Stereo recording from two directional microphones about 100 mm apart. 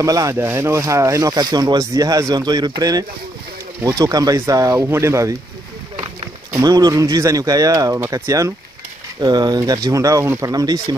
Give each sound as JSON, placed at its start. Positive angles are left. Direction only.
{"t": 0.0, "sound": "speech", "side_deg": -30}
{"t": 6.5, "sound": "speech", "side_deg": -35}
{"t": 9.2, "sound": "speech", "side_deg": -45}
{"t": 10.5, "sound": "speech", "side_deg": -40}